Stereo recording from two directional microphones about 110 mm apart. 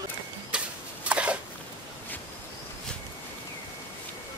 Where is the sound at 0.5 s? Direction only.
10° right (ahead or behind).